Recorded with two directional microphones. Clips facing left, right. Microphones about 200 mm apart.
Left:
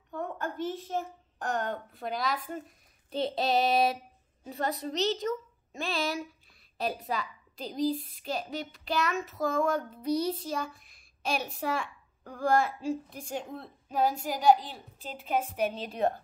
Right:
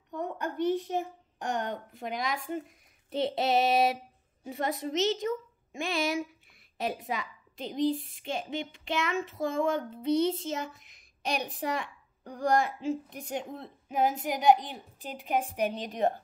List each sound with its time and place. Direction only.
0.1 s a child's voice: 15° right (ahead or behind)